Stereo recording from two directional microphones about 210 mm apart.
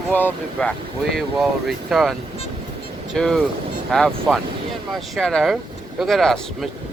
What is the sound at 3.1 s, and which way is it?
Speech, 5° left (ahead or behind).